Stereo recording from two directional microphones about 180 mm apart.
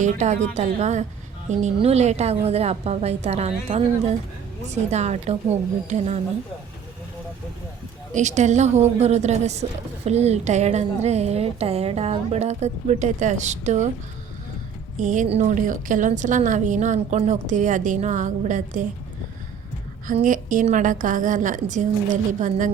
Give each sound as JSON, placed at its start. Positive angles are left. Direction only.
{"t": 0.0, "sound": "a woman's voice", "side_deg": -40}
{"t": 8.1, "sound": "a woman's voice", "side_deg": -40}
{"t": 15.0, "sound": "a woman's voice", "side_deg": -45}
{"t": 20.1, "sound": "a woman's voice", "side_deg": -45}